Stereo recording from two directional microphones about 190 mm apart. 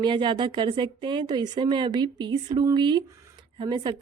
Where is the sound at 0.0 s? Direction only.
25° right (ahead or behind).